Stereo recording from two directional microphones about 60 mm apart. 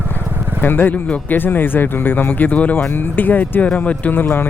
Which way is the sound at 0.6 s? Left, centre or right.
Left.